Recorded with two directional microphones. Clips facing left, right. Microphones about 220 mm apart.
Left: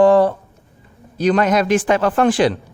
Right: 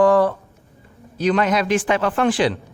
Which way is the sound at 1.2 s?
40° left (ahead or behind).